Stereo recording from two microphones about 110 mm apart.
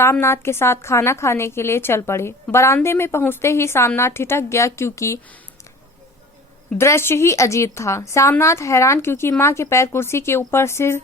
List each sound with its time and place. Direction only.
0.0 s a woman's voice: 25° left (ahead or behind)
6.7 s a woman's voice: 25° left (ahead or behind)